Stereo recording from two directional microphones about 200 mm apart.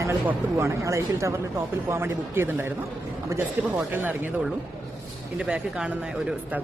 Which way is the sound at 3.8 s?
10° right (ahead or behind).